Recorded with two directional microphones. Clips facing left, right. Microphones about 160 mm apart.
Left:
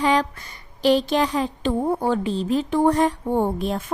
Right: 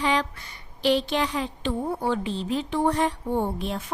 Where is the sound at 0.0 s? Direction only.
45° left (ahead or behind).